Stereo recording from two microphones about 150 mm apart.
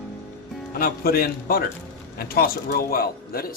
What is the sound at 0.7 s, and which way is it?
A man's voice, 80° left.